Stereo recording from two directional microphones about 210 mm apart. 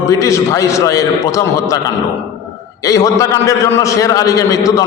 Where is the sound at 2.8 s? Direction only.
15° left (ahead or behind).